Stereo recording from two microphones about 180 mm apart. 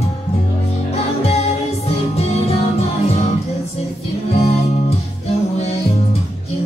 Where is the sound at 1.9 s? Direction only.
35° left (ahead or behind).